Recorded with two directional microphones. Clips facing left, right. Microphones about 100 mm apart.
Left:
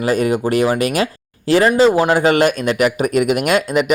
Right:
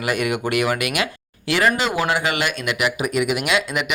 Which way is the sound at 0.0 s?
35° left (ahead or behind).